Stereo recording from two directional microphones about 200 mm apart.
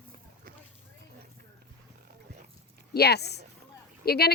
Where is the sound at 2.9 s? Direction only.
55° left (ahead or behind).